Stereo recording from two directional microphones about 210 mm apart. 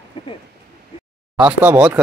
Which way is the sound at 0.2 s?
25° left (ahead or behind).